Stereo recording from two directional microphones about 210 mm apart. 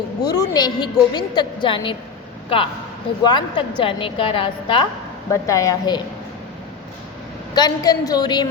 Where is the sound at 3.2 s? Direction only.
20° left (ahead or behind).